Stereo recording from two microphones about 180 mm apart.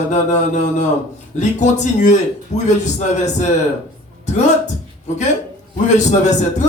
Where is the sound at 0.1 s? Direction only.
40° left (ahead or behind).